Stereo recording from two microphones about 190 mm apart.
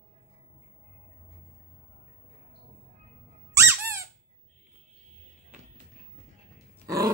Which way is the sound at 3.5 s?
15° right (ahead or behind).